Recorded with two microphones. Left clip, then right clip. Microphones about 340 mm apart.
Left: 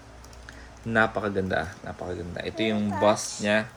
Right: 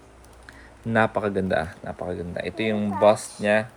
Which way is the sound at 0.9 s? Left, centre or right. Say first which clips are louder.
Right 2 dB; right.